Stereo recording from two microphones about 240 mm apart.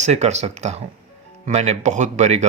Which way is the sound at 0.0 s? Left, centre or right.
Right.